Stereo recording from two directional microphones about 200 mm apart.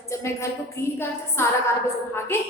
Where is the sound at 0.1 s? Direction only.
15° left (ahead or behind).